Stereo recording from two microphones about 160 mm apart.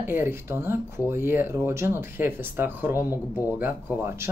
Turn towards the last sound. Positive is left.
turn(degrees=-15)  # may be behind; listen again after turning